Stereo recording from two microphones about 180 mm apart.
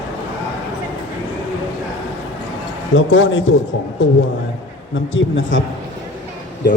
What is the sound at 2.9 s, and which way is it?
Speech, 90° left.